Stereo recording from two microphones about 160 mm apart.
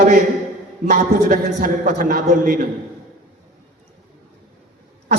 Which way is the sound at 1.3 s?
60° right (ahead or behind).